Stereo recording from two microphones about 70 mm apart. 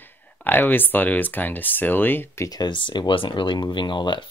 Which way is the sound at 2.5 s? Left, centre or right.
Left.